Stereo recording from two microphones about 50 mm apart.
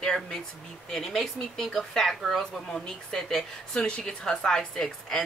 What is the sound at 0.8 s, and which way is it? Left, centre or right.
Speech, centre.